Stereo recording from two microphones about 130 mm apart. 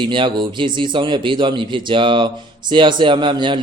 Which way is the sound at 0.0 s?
40° right (ahead or behind).